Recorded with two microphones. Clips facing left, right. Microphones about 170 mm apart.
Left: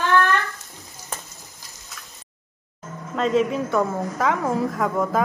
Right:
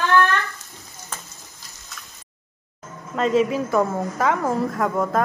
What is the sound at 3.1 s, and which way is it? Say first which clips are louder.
A woman's voice: right 1 dB; centre (ahead or behind).